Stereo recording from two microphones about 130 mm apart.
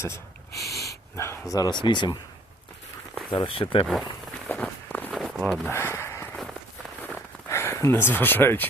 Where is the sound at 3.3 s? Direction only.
40° left (ahead or behind).